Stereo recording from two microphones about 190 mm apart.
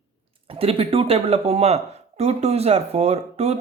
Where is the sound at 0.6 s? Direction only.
30° right (ahead or behind).